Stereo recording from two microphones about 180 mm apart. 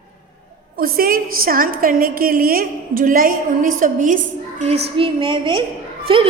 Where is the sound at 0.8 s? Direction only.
55° right (ahead or behind).